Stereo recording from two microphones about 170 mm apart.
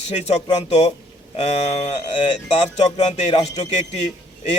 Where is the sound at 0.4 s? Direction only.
40° left (ahead or behind).